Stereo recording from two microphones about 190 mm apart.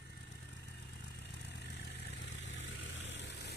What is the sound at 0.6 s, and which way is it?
Vehicle, 60° left (ahead or behind).